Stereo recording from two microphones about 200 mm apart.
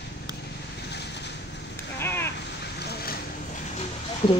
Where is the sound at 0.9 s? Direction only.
60° left (ahead or behind).